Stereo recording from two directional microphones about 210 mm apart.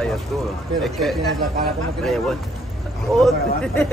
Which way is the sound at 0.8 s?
Centre (ahead or behind).